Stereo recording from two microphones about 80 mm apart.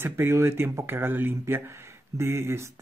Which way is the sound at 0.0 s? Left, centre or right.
Right.